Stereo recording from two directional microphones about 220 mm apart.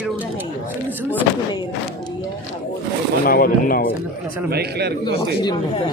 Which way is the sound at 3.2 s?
40° left (ahead or behind).